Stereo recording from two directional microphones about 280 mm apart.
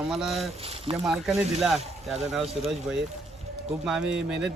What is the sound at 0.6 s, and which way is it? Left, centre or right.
Speech, centre.